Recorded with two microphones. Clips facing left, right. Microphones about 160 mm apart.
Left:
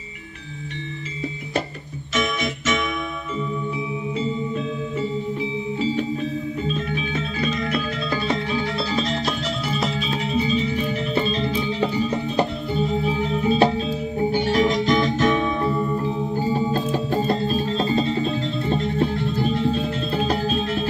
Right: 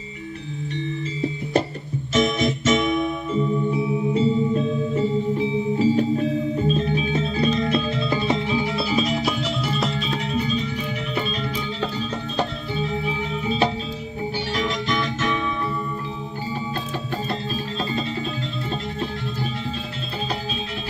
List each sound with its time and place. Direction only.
2.1 s music: 35° right (ahead or behind)
6.7 s music: 30° right (ahead or behind); by 10.9 s 5° left (ahead or behind)
11.1 s music: 25° left (ahead or behind)
13.1 s organ: 35° left (ahead or behind)
14.3 s music: 45° left (ahead or behind)
17.5 s music: 25° left (ahead or behind)